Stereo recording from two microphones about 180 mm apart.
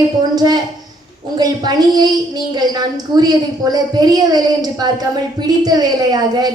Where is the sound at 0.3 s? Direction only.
20° right (ahead or behind).